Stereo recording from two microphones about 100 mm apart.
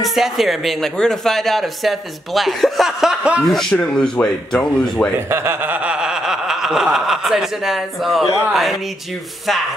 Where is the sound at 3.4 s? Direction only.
5° left (ahead or behind).